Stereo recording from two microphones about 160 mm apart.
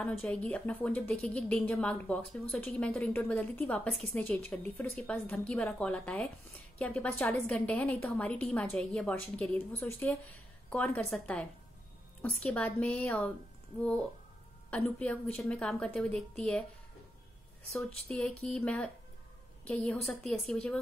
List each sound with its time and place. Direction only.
0.0 s a woman's voice: 5° left (ahead or behind)
14.7 s a woman's voice: 10° left (ahead or behind)
18.1 s a woman's voice: 5° left (ahead or behind)